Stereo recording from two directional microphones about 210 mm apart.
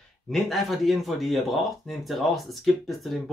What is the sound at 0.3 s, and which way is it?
Speech, centre (ahead or behind).